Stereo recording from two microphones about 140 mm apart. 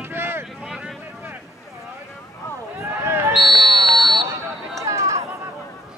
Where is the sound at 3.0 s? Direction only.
15° right (ahead or behind).